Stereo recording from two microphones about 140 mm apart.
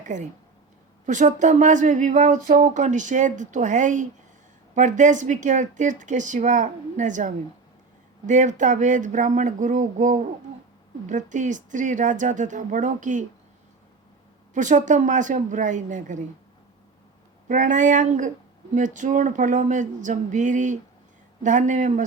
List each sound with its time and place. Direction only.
0.0 s speech: 60° right (ahead or behind)
14.5 s speech: 65° right (ahead or behind)
17.5 s speech: 65° right (ahead or behind)